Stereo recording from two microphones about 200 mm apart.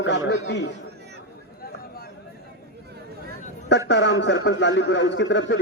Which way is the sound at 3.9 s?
65° left (ahead or behind).